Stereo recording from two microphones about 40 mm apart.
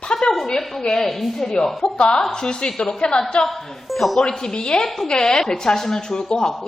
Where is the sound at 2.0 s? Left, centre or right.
Left.